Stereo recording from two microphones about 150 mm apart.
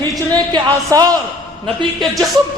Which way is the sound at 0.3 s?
25° right (ahead or behind).